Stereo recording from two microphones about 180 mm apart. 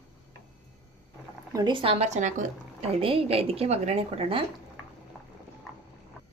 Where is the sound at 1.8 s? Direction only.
35° right (ahead or behind).